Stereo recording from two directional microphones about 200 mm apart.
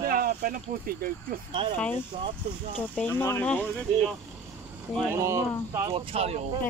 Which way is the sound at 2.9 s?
10° left (ahead or behind).